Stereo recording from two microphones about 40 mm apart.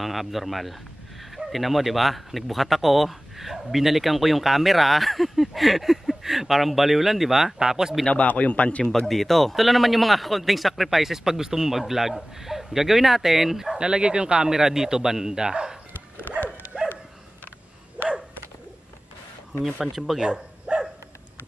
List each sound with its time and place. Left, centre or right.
0.0 s a man's voice: centre
8.3 s a man's voice: left
9.0 s speech: centre
13.7 s speech: right
14.5 s a man's voice: centre
16.7 s dog: centre
18.0 s bow-wow: right
19.6 s speech: centre
20.2 s bow-wow: centre